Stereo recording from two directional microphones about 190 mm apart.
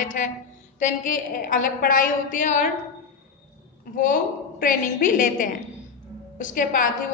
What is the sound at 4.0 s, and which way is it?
A man's voice, 45° left (ahead or behind).